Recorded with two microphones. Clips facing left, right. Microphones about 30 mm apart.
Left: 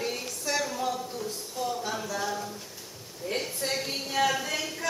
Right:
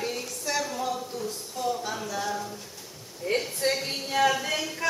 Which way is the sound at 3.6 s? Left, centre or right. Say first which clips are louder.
Right 5 dB; right.